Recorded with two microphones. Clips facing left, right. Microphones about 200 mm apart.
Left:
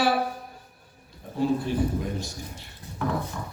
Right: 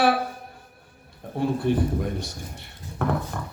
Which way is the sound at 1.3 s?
55° right (ahead or behind).